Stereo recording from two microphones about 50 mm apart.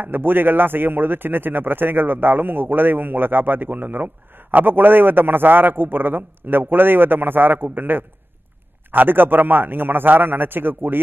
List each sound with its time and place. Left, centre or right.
0.0 s a man's voice: right